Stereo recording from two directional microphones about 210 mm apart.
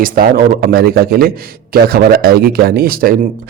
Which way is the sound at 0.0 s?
40° right (ahead or behind).